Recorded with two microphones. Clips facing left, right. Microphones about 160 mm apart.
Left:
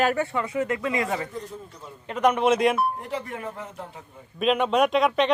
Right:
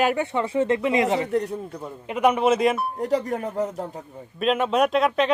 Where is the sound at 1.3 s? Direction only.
70° right (ahead or behind).